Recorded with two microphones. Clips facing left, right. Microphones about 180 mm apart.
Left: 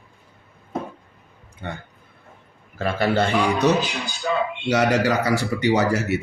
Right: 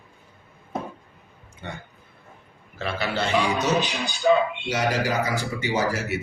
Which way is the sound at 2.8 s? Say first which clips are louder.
Left 6 dB; 50° left (ahead or behind).